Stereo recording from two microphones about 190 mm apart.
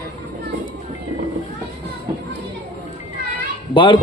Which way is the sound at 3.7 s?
25° left (ahead or behind).